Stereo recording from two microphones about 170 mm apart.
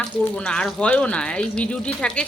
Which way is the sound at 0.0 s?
5° left (ahead or behind).